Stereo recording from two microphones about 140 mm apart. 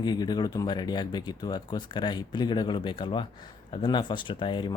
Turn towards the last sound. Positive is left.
turn(degrees=35)  # may be behind; listen again after turning